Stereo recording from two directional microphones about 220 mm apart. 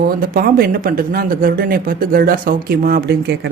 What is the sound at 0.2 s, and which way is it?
Speech, 40° right (ahead or behind).